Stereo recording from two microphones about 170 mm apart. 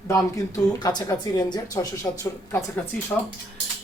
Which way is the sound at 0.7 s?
25° left (ahead or behind).